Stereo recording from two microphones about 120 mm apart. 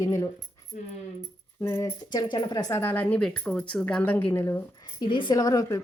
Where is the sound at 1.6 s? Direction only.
20° left (ahead or behind).